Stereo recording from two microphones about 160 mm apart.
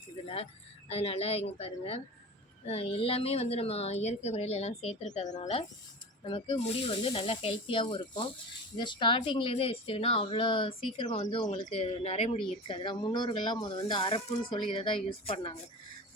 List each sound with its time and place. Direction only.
0.9 s a woman's voice: 40° left (ahead or behind)